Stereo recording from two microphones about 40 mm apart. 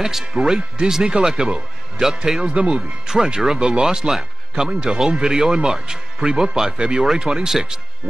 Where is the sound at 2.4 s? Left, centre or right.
Right.